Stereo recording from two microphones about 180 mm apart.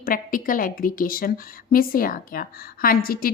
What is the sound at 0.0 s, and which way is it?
A woman's voice, 50° left (ahead or behind).